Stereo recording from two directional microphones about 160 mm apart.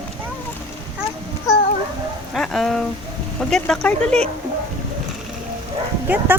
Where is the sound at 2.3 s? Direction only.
Centre (ahead or behind).